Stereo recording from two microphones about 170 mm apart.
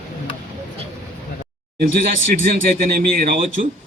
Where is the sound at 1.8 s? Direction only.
55° right (ahead or behind).